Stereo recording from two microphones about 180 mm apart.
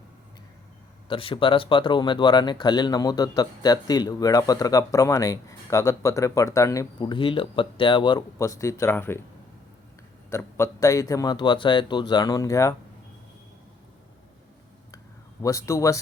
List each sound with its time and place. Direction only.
1.0 s speech: 30° left (ahead or behind); by 9.2 s 15° left (ahead or behind)
10.2 s speech: 15° left (ahead or behind)
14.9 s a sound: 15° left (ahead or behind)